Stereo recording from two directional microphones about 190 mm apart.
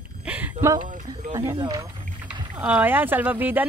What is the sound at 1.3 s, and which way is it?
Speech, 20° right (ahead or behind).